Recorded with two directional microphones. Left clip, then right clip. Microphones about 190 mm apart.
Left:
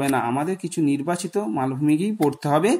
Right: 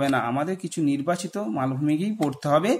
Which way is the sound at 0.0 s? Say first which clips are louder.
Left 1 dB; 15° left (ahead or behind).